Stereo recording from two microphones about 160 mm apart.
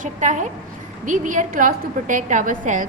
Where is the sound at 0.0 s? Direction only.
50° right (ahead or behind).